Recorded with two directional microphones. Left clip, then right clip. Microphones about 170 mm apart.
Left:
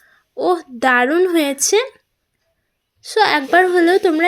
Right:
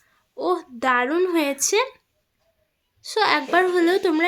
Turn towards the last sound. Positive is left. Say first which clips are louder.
# left 6 dB
turn(degrees=10)  # may be behind; listen again after turning